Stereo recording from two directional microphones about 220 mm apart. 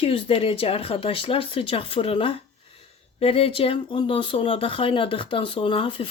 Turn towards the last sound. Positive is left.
turn(degrees=25)  # may be behind; listen again after turning